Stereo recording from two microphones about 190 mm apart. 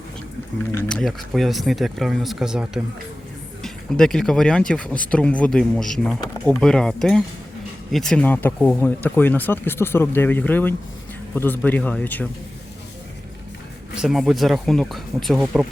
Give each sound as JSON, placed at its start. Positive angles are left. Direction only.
{"t": 0.6, "sound": "speech", "side_deg": 10}
{"t": 13.9, "sound": "speech", "side_deg": -5}